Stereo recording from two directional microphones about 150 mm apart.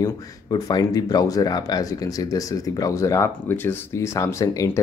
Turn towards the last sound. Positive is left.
turn(degrees=20)  # may be behind; listen again after turning